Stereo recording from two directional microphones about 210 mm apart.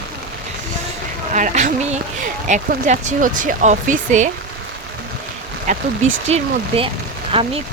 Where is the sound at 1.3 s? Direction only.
35° right (ahead or behind).